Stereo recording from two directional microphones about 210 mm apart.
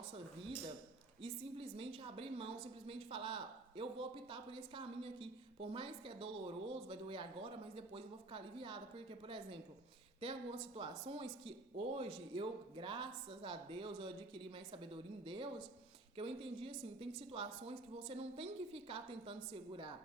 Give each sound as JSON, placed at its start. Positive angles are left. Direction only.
{"t": 1.2, "sound": "speech", "side_deg": -25}